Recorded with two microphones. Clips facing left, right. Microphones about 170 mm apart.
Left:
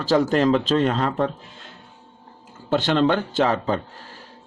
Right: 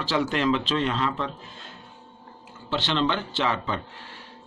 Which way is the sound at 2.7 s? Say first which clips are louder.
Left 6 dB; 50° left (ahead or behind).